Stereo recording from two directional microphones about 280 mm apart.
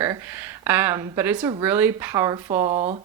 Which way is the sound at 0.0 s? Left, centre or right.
Centre.